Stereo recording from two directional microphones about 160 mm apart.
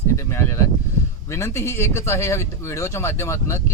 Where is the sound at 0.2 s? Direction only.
15° left (ahead or behind).